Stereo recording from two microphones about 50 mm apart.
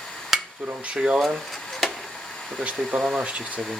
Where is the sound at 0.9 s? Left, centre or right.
Centre.